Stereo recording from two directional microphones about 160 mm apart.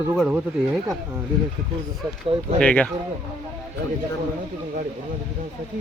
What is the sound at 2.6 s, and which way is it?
Speech, 5° left (ahead or behind).